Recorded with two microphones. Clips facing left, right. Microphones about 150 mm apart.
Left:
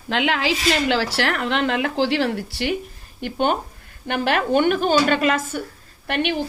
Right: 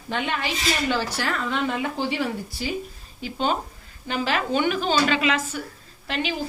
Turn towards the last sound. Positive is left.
turn(degrees=65)  # may be behind; listen again after turning